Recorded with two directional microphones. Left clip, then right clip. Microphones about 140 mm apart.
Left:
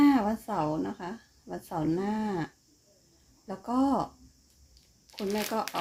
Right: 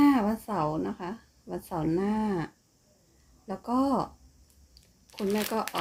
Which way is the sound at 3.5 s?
15° right (ahead or behind).